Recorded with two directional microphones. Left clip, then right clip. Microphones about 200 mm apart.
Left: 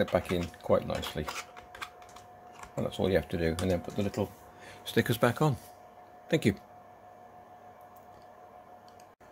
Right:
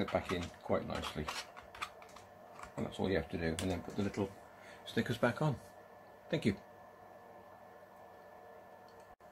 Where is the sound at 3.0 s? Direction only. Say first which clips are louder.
Left 7 dB; 55° left (ahead or behind).